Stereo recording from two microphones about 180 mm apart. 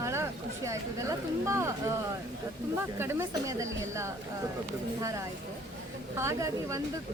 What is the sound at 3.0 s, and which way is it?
Speech, 15° right (ahead or behind).